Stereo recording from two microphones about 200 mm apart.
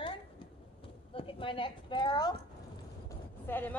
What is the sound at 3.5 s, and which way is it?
Speech, 10° left (ahead or behind).